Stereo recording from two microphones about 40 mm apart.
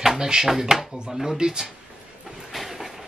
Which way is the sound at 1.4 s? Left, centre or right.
Centre.